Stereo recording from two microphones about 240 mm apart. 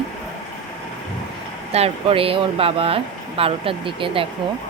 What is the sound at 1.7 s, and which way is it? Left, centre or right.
Speech, right.